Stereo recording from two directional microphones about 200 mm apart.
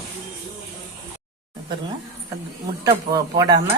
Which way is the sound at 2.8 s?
20° right (ahead or behind).